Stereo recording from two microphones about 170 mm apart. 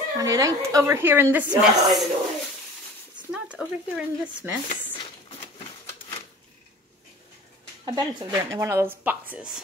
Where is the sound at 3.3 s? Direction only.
5° right (ahead or behind).